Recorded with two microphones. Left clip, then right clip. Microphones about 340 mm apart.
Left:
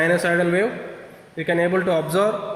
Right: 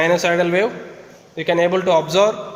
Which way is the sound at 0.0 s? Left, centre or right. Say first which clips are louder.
Right 3 dB; right.